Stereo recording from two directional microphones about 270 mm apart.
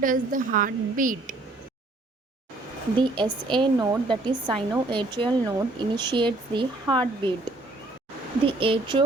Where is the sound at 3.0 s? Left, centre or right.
Centre.